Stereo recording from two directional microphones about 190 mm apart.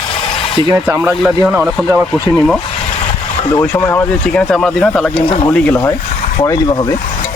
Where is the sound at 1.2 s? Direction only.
5° right (ahead or behind).